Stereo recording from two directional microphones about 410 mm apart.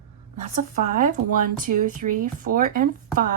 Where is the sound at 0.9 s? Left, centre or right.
Centre.